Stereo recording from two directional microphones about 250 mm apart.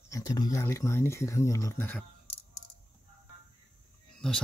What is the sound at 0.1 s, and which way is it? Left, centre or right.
Speech, centre.